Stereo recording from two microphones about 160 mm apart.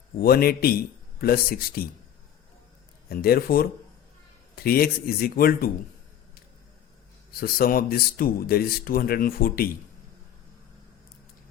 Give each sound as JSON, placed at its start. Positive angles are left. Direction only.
{"t": 0.2, "sound": "speech", "side_deg": 70}
{"t": 3.1, "sound": "speech", "side_deg": 70}
{"t": 7.3, "sound": "speech", "side_deg": 65}